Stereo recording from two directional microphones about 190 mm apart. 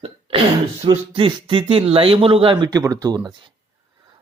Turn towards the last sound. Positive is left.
turn(degrees=-20)  # may be behind; listen again after turning